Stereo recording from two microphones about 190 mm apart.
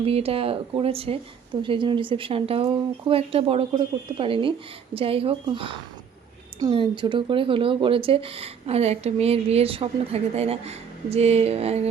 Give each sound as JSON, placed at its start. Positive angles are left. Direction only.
{"t": 0.0, "sound": "speech", "side_deg": -30}